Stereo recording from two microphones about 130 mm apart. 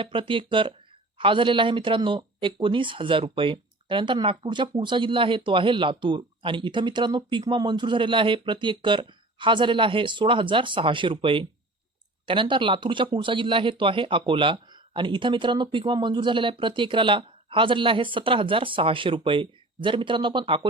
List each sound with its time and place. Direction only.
0.0 s speech: 40° right (ahead or behind)